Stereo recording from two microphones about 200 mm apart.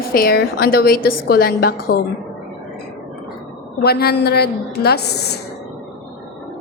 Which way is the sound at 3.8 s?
50° left (ahead or behind).